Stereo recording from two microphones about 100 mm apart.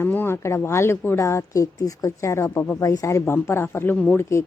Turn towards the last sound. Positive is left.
turn(degrees=25)  # may be behind; listen again after turning